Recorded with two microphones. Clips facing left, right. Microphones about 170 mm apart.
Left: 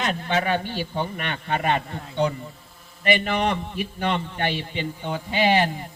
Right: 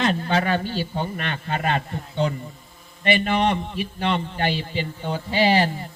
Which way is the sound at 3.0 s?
30° right (ahead or behind).